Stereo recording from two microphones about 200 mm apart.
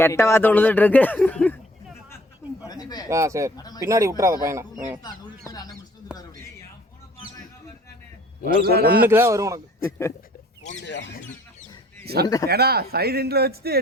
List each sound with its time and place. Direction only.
0.0 s speech: 15° left (ahead or behind)
2.6 s a sound: 20° left (ahead or behind)
3.1 s speech: 15° right (ahead or behind)
5.5 s a sound: 20° left (ahead or behind)
8.4 s speech: 50° right (ahead or behind)
9.0 s speech: 10° right (ahead or behind)
10.6 s a sound: 35° left (ahead or behind)
10.8 s speech: 60° left (ahead or behind)
12.0 s a man's voice: 50° right (ahead or behind)